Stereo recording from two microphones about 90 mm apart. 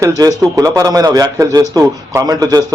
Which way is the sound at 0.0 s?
40° right (ahead or behind).